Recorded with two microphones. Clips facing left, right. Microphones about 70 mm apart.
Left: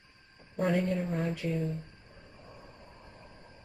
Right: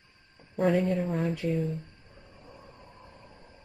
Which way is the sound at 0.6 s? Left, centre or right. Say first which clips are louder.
Right 4 dB; centre.